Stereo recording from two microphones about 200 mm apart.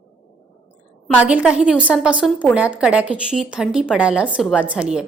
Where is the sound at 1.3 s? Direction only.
5° right (ahead or behind).